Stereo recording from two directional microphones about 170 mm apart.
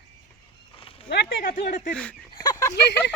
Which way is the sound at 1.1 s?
80° left.